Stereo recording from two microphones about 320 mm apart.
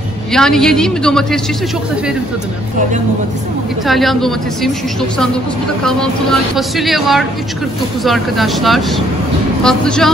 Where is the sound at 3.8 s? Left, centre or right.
Centre.